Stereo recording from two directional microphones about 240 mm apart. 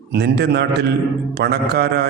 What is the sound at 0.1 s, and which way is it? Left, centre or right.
Speech, right.